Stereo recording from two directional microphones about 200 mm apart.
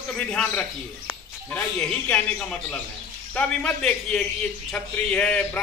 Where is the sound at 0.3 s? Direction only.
5° left (ahead or behind).